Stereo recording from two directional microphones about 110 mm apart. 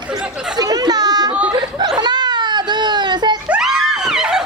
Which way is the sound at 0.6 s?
35° right (ahead or behind).